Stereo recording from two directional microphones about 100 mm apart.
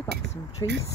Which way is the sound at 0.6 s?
40° left (ahead or behind).